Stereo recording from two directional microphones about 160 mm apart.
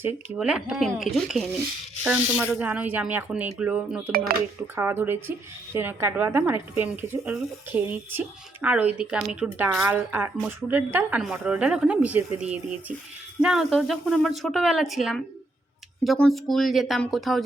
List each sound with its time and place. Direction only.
0.3 s speech: 5° right (ahead or behind)
4.1 s speech: 70° right (ahead or behind)
4.7 s speech: 15° right (ahead or behind)